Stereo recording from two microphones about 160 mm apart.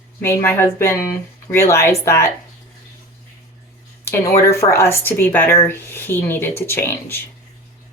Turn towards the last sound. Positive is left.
turn(degrees=15)  # may be behind; listen again after turning